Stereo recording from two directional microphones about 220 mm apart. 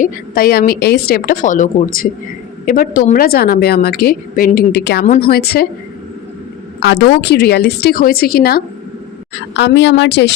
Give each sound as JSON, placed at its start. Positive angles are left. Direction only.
{"t": 0.0, "sound": "a woman's voice", "side_deg": 40}
{"t": 6.7, "sound": "a woman's voice", "side_deg": 50}